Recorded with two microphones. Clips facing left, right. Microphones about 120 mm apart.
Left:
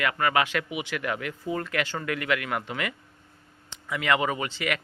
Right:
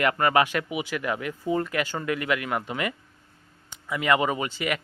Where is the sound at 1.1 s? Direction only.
20° right (ahead or behind).